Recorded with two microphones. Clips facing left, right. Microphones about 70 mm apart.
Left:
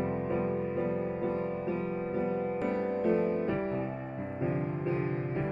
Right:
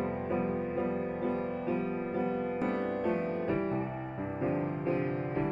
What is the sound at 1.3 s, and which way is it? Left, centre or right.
Music, right.